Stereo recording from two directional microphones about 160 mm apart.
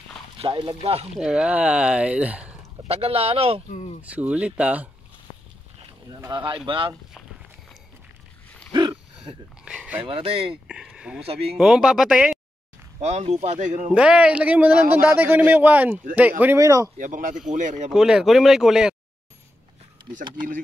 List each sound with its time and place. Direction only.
0.4 s speech: 35° right (ahead or behind)
1.1 s speech: 5° right (ahead or behind)
2.9 s speech: 40° right (ahead or behind)
3.7 s speech: 40° left (ahead or behind)
4.0 s speech: 10° right (ahead or behind)
6.0 s speech: 25° right (ahead or behind)
8.7 s a sound: 30° right (ahead or behind)
9.7 s dog: 10° right (ahead or behind)
10.0 s speech: 35° right (ahead or behind)
10.7 s speech: 5° right (ahead or behind)
13.0 s speech: 45° right (ahead or behind)
13.9 s speech: 5° right (ahead or behind)
17.0 s speech: 55° right (ahead or behind)
17.9 s speech: 5° right (ahead or behind)